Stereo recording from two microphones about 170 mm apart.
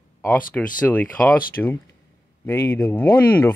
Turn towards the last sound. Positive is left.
turn(degrees=10)  # may be behind; listen again after turning